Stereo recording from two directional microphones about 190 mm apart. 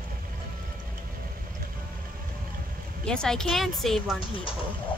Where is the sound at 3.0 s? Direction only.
5° left (ahead or behind).